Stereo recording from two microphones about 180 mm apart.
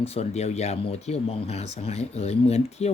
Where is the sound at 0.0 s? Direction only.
35° left (ahead or behind).